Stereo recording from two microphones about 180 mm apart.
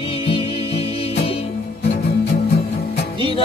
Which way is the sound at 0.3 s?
35° left (ahead or behind).